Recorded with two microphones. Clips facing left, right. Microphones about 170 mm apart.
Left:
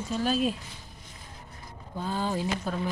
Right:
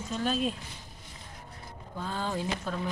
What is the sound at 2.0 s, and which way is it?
Speech, 10° left (ahead or behind).